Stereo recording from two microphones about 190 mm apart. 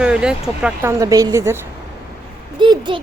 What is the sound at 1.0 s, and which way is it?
Speech, 20° right (ahead or behind).